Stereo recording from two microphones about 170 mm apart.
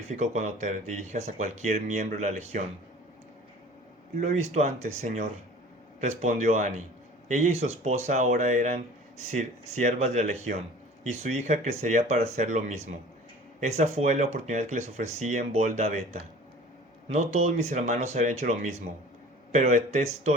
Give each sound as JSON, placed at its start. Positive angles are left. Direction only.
{"t": 0.1, "sound": "speech", "side_deg": -45}
{"t": 4.2, "sound": "speech", "side_deg": -45}